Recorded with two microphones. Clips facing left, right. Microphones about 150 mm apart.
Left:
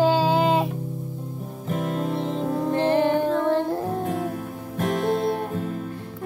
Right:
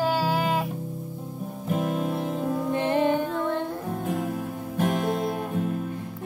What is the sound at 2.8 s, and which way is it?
Music, 35° left (ahead or behind).